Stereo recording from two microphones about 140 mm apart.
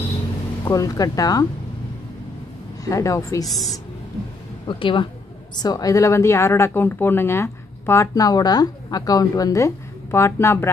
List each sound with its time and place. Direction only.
0.7 s speech: 25° left (ahead or behind)
2.8 s speech: 20° left (ahead or behind)
3.4 s speech: centre (ahead or behind)
4.6 s speech: 35° left (ahead or behind); by 10.7 s 20° left (ahead or behind)